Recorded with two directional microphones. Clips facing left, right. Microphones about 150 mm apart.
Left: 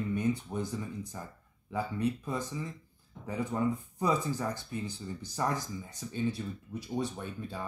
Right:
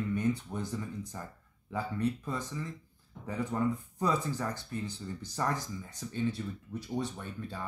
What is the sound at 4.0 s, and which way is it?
Speech, 10° left (ahead or behind).